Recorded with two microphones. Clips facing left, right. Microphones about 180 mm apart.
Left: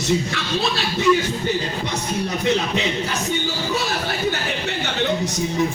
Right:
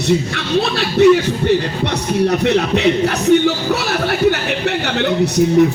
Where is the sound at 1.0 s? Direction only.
65° right (ahead or behind).